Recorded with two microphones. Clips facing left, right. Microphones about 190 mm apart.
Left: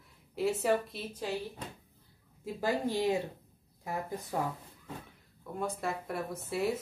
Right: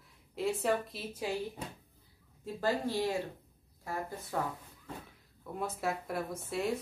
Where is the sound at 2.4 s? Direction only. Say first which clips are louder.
Left 1 dB; 15° left (ahead or behind).